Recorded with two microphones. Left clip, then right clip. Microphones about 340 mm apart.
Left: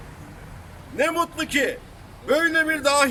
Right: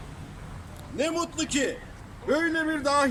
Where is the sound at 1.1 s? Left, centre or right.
Left.